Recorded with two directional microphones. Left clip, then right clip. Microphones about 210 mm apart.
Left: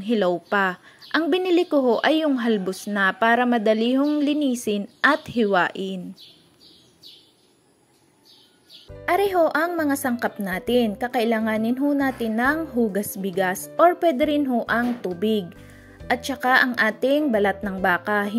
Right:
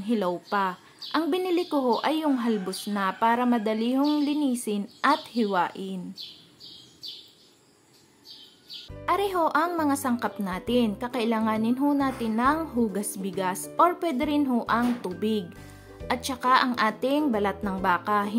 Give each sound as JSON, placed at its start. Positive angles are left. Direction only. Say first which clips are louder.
{"t": 0.0, "sound": "speech", "louder": "left 6 dB", "side_deg": 15}
{"t": 9.0, "sound": "speech", "louder": "left 5 dB", "side_deg": 15}